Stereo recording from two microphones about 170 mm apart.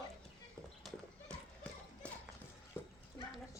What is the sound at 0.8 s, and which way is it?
Clip-clop, centre (ahead or behind).